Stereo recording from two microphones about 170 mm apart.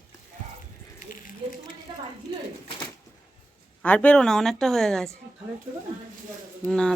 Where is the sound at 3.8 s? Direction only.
10° left (ahead or behind).